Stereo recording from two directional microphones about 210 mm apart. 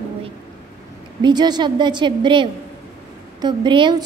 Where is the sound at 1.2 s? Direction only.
20° right (ahead or behind).